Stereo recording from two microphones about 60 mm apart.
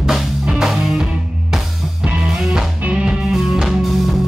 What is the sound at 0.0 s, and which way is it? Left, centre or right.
Music, centre.